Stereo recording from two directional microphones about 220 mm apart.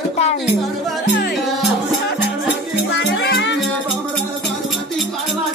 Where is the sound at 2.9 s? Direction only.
50° left (ahead or behind).